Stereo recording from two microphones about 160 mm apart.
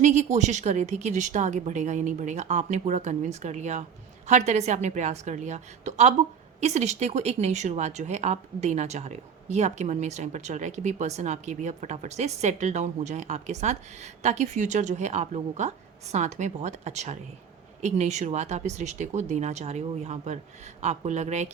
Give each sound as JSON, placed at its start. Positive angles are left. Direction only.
{"t": 0.0, "sound": "speech", "side_deg": -50}